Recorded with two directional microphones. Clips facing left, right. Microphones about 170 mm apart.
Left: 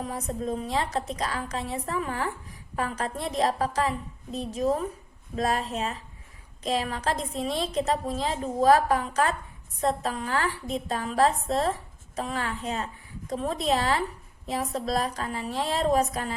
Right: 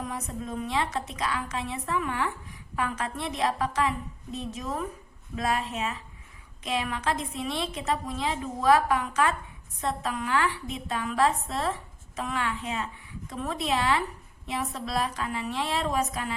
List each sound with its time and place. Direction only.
0.0 s a woman's voice: 35° left (ahead or behind)